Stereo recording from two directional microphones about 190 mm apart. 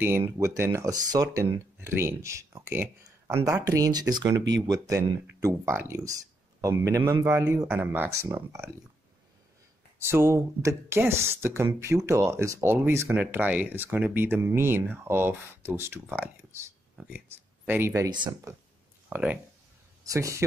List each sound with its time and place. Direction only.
0.0 s speech: 10° right (ahead or behind)
9.9 s speech: 15° right (ahead or behind)